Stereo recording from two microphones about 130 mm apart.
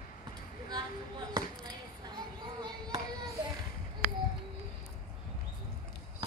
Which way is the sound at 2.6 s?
30° right (ahead or behind).